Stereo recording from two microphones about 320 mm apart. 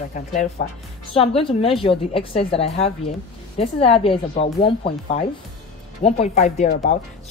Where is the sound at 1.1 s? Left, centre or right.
Centre.